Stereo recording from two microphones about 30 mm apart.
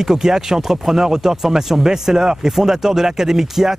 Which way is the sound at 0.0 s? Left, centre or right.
Centre.